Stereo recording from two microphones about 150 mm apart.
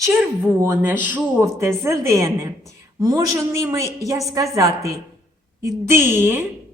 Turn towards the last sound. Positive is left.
turn(degrees=-15)  # may be behind; listen again after turning